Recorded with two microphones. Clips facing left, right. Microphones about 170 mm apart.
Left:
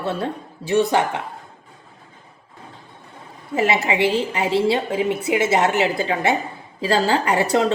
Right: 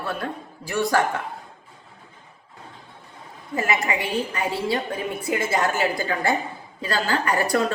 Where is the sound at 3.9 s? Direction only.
25° left (ahead or behind).